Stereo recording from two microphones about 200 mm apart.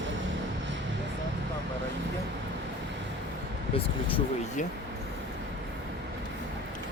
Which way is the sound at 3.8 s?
30° left (ahead or behind).